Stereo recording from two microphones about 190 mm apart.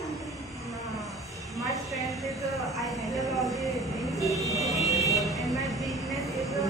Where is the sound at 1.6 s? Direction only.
Centre (ahead or behind).